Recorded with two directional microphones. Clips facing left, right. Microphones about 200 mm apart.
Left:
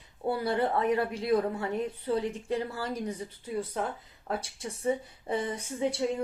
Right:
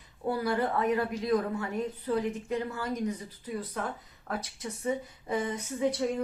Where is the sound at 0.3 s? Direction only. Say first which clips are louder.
Left 1 dB; 30° left (ahead or behind).